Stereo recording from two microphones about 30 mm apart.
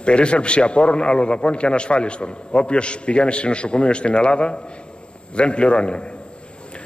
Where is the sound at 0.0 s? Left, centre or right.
Left.